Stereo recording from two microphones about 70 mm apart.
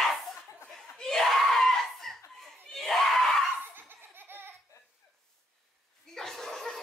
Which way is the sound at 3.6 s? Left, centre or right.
Right.